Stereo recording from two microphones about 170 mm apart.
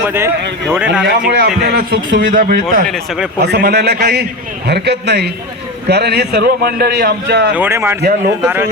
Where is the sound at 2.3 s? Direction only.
55° right (ahead or behind).